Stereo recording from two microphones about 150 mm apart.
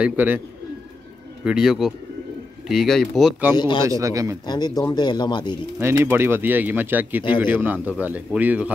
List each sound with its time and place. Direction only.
0.0 s speech: 10° right (ahead or behind)
1.4 s speech: 5° right (ahead or behind)
3.5 s speech: 30° left (ahead or behind)
3.8 s speech: 20° right (ahead or behind)
4.5 s speech: 25° left (ahead or behind)
5.8 s speech: 15° right (ahead or behind)